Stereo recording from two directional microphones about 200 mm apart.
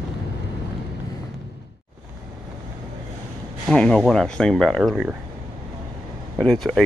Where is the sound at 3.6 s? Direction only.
5° left (ahead or behind).